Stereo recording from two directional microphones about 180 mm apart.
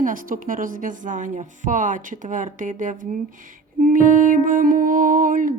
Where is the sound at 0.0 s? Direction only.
50° right (ahead or behind).